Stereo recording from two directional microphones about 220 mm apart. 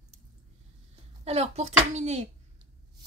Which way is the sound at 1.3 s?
30° right (ahead or behind).